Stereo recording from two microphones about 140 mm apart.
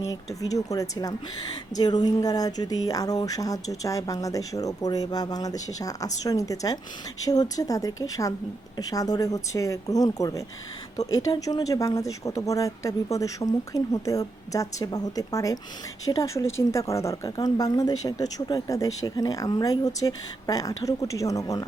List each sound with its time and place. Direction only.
0.4 s a woman's voice: 25° left (ahead or behind)